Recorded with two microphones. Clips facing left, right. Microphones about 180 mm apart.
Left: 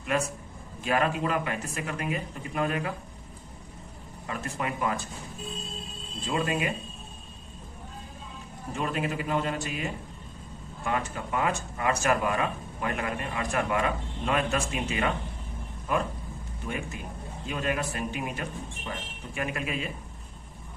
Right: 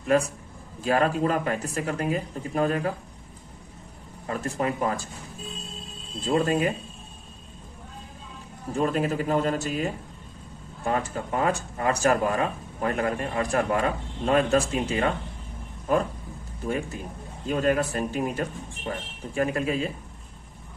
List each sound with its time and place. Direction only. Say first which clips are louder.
0.1 s speech: right 6 dB; 35° right (ahead or behind)
4.3 s speech: right 5 dB; 35° right (ahead or behind)
6.2 s speech: right 6 dB; 40° right (ahead or behind)
8.7 s speech: right 6 dB; 40° right (ahead or behind)